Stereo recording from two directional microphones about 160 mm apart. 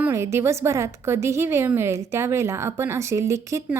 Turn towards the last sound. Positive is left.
turn(degrees=-20)  # may be behind; listen again after turning